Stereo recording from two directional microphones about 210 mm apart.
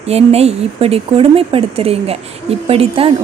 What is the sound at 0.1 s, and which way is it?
Speech, 30° right (ahead or behind).